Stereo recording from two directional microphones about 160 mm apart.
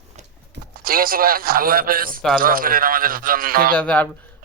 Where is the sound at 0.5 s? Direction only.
65° right (ahead or behind).